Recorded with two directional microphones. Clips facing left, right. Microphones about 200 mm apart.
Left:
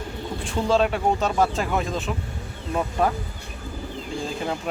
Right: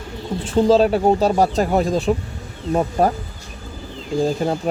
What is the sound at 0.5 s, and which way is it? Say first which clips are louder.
Speech: right 7 dB; 35° right (ahead or behind).